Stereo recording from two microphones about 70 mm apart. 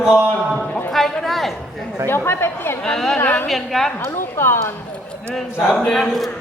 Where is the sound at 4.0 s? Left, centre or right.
Left.